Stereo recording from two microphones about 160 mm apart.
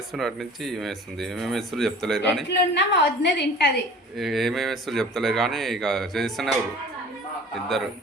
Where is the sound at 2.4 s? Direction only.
90° left.